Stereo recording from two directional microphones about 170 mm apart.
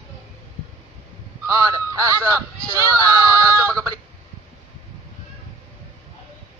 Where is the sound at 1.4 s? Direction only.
20° right (ahead or behind).